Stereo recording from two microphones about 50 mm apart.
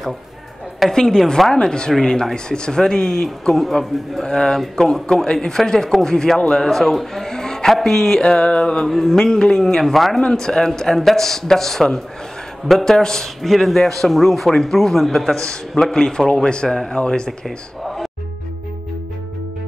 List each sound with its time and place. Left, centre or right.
0.9 s a man's voice: centre
8.2 s speech: centre
8.8 s a man's voice: centre
17.5 s speech: centre